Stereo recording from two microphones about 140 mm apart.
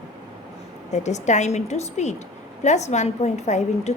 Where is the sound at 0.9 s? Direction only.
55° left (ahead or behind).